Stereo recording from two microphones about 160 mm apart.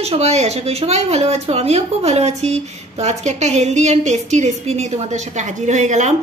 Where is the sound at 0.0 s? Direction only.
40° right (ahead or behind).